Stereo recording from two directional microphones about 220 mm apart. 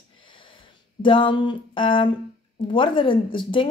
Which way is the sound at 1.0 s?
25° left (ahead or behind).